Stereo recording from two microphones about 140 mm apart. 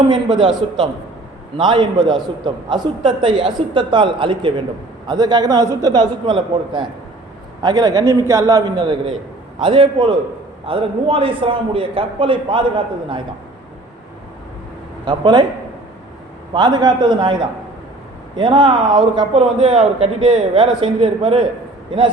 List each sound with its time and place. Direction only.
0.6 s a man's voice: 45° right (ahead or behind)
15.0 s a man's voice: 35° right (ahead or behind)
16.6 s a man's voice: 30° right (ahead or behind)